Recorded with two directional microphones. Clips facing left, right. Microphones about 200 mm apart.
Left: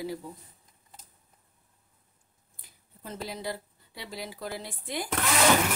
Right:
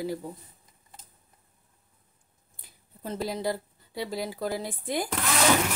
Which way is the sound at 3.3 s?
40° right (ahead or behind).